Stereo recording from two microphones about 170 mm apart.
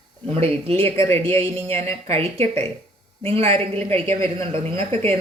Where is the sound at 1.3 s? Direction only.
15° left (ahead or behind).